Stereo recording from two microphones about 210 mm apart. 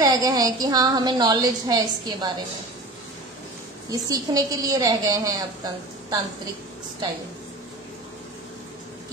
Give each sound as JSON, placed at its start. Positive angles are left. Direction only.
{"t": 0.0, "sound": "a woman's voice", "side_deg": -15}
{"t": 3.9, "sound": "a woman's voice", "side_deg": -15}